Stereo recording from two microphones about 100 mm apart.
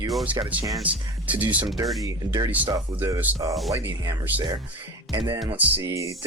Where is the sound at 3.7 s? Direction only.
25° right (ahead or behind).